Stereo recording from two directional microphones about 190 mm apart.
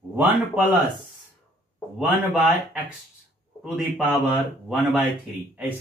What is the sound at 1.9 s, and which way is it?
Speech, 5° right (ahead or behind).